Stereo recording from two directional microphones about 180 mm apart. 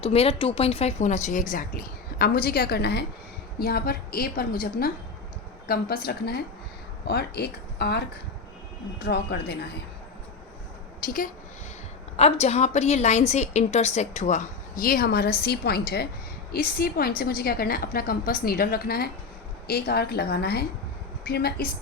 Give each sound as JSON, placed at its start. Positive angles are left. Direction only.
{"t": 0.0, "sound": "a woman's voice", "side_deg": 35}
{"t": 11.0, "sound": "a woman's voice", "side_deg": 50}
{"t": 12.1, "sound": "a woman's voice", "side_deg": 35}